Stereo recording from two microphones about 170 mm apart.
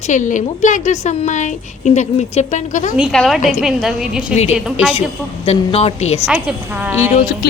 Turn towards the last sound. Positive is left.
turn(degrees=65)  # may be behind; listen again after turning